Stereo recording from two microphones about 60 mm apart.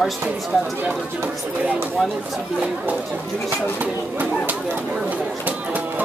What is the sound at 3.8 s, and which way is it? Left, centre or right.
Speech, right.